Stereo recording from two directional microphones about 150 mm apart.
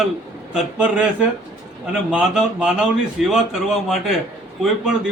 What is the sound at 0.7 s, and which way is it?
Speech, 5° right (ahead or behind).